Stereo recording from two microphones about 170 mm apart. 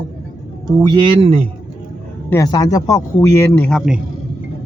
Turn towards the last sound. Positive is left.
turn(degrees=10)  # may be behind; listen again after turning